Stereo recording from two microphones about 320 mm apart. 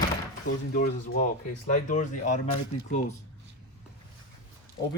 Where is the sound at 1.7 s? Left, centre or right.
Left.